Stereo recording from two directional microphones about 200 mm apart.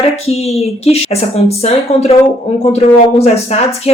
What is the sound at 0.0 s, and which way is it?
Speech, 30° left (ahead or behind).